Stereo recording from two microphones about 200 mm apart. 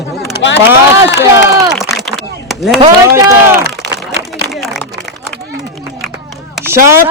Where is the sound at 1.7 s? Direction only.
Centre (ahead or behind).